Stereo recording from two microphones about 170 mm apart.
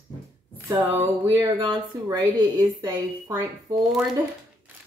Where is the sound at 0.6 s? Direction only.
15° right (ahead or behind).